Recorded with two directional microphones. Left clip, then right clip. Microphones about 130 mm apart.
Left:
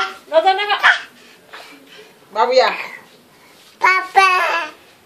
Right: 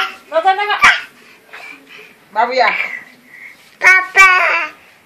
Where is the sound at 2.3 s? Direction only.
20° left (ahead or behind).